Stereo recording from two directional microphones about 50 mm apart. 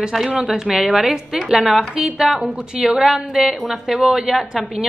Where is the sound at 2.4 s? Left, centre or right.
Right.